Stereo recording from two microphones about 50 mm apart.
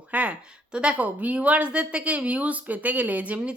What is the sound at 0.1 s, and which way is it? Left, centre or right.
Speech, right.